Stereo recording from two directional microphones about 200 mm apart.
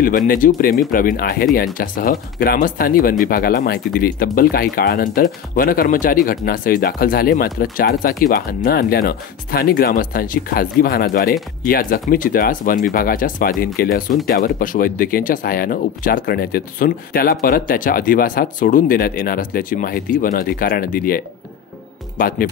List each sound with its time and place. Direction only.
0.3 s speech: 45° left (ahead or behind)